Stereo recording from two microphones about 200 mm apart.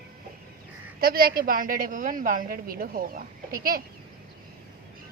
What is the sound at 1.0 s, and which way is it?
A woman's voice, 50° right (ahead or behind).